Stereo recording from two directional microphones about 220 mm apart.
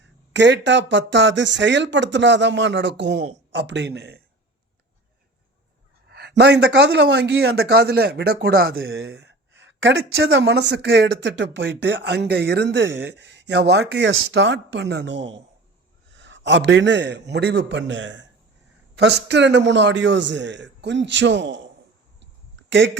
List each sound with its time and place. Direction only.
0.0 s a man's voice: 55° right (ahead or behind)
6.1 s a man's voice: 45° right (ahead or behind)